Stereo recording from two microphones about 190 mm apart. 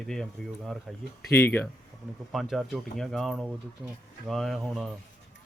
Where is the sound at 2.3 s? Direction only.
Centre (ahead or behind).